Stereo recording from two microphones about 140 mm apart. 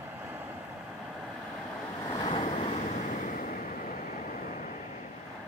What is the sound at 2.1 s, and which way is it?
Waves, 40° left (ahead or behind).